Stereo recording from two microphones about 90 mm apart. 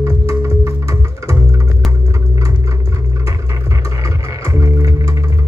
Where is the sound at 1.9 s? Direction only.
35° right (ahead or behind).